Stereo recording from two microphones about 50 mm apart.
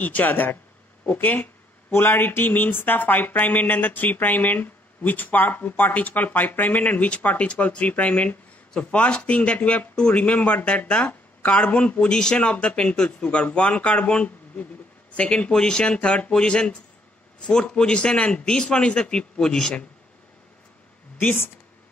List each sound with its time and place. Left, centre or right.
0.0 s speech: left
1.9 s speech: left
12.1 s a man's voice: centre
21.2 s speech: left